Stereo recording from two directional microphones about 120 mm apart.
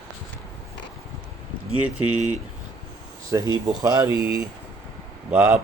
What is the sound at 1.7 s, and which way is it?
Speech, 10° right (ahead or behind).